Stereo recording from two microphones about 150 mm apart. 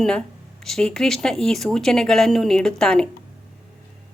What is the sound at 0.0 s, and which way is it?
Speech, 5° left (ahead or behind).